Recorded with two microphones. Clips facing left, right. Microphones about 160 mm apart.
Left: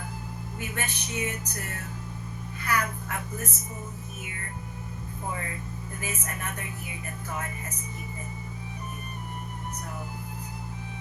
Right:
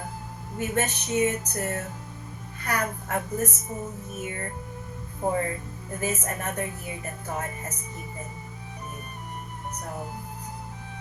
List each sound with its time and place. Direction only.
0.6 s a sound: 45° right (ahead or behind)
5.2 s a woman's voice: 40° right (ahead or behind)
9.8 s music: 45° right (ahead or behind)